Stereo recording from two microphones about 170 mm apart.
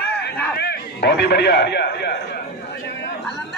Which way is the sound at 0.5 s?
75° left (ahead or behind).